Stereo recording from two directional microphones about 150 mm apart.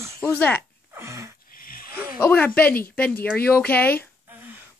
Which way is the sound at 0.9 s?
20° right (ahead or behind).